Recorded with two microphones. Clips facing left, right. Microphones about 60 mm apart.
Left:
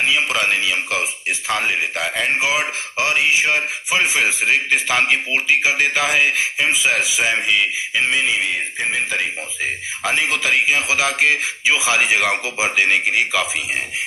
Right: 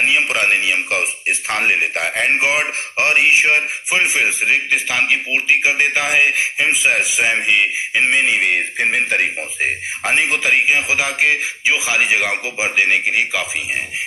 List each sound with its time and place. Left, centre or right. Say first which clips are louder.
0.0 s a man's voice: right 2 dB; right
4.7 s a man's voice: even; centre
5.3 s speech: right 1 dB; right